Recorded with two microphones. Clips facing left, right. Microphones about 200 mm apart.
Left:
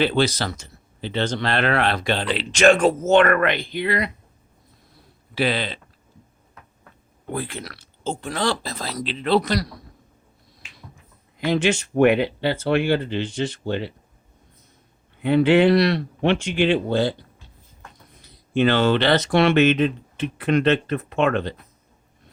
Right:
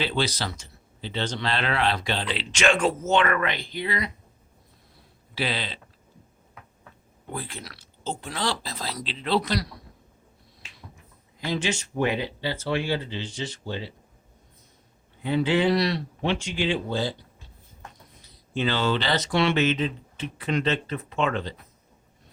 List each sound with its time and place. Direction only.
0.0 s speech: 55° left (ahead or behind)
5.3 s speech: 55° left (ahead or behind)
7.3 s speech: 65° left (ahead or behind); by 9.6 s 45° left (ahead or behind)
11.3 s speech: 65° left (ahead or behind)
15.2 s speech: 65° left (ahead or behind)
18.2 s speech: 60° left (ahead or behind)